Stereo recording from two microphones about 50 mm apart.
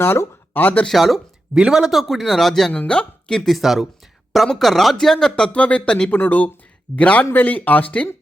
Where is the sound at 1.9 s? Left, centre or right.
Centre.